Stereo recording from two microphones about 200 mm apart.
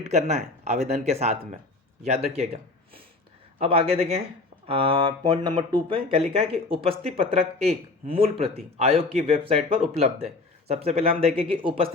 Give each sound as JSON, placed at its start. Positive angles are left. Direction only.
{"t": 0.0, "sound": "speech", "side_deg": -35}